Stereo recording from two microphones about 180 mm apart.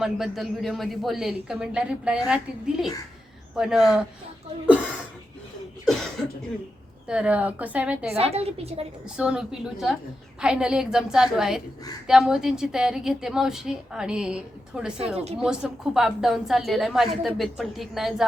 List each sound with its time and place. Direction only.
0.0 s a woman's voice: centre (ahead or behind)
5.8 s a woman's voice: centre (ahead or behind)
8.1 s a woman's voice: 35° right (ahead or behind)
9.1 s a woman's voice: 5° right (ahead or behind)